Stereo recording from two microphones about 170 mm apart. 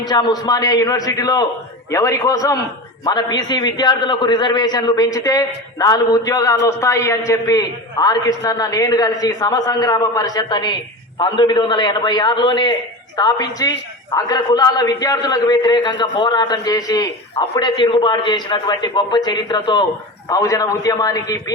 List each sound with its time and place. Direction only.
0.1 s a man's voice: 25° left (ahead or behind)